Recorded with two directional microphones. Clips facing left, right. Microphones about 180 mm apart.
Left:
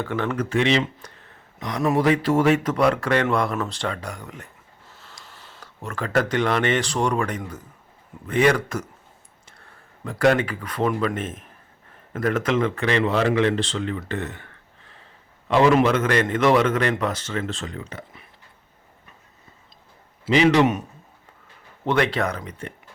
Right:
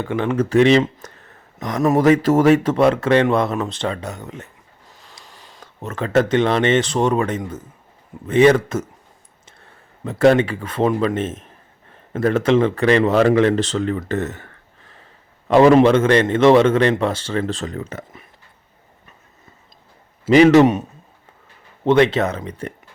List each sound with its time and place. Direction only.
0.0 s a man's voice: 20° right (ahead or behind)
0.4 s speech: 40° right (ahead or behind)
2.7 s a man's voice: 25° right (ahead or behind); by 18.2 s 45° right (ahead or behind)
20.2 s speech: 45° right (ahead or behind)
21.8 s a man's voice: 20° right (ahead or behind)